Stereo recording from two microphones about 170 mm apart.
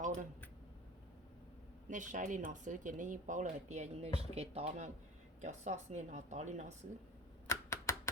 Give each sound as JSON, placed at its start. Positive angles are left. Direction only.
{"t": 0.0, "sound": "a sound", "side_deg": -50}
{"t": 1.9, "sound": "speech", "side_deg": -45}
{"t": 7.4, "sound": "typing", "side_deg": 15}